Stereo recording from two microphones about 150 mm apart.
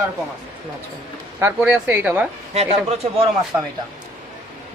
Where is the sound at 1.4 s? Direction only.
15° right (ahead or behind).